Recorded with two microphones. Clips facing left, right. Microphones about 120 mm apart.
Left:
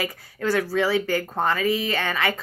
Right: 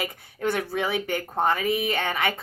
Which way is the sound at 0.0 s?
20° right (ahead or behind).